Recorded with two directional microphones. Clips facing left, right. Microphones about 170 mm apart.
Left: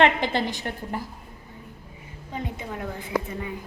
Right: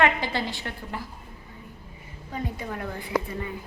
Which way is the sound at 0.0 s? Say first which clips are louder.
Left 3 dB; 20° left (ahead or behind).